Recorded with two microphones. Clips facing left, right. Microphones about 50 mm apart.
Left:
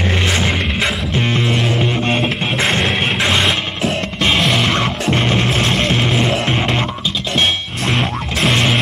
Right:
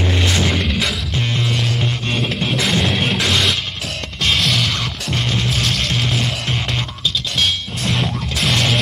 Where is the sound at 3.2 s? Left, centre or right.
Left.